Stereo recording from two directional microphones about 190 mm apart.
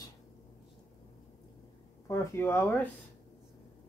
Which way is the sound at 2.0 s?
15° left (ahead or behind).